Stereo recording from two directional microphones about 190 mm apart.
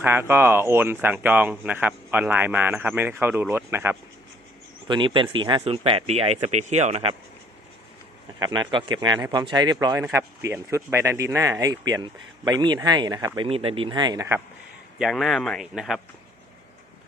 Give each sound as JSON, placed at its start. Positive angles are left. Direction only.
{"t": 0.0, "sound": "speech", "side_deg": -10}
{"t": 4.9, "sound": "speech", "side_deg": -25}
{"t": 8.4, "sound": "speech", "side_deg": -25}
{"t": 14.9, "sound": "speech", "side_deg": 0}